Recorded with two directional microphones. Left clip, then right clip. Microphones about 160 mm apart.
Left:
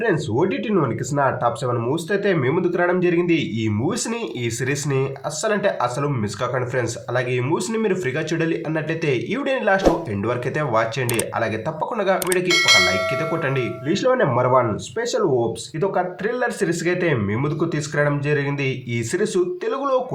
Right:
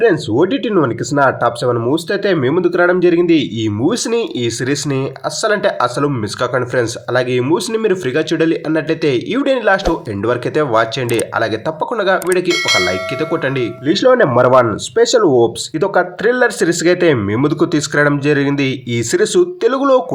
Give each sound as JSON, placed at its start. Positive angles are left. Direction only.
{"t": 0.0, "sound": "speech", "side_deg": -35}
{"t": 12.5, "sound": "speech", "side_deg": 0}
{"t": 13.4, "sound": "speech", "side_deg": -35}